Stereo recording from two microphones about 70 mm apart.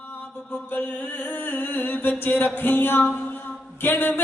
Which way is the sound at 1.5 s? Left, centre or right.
Left.